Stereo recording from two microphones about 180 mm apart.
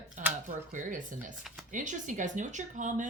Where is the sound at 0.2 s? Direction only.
45° right (ahead or behind).